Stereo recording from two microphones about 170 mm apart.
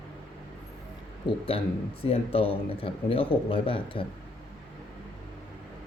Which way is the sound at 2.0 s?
35° left (ahead or behind).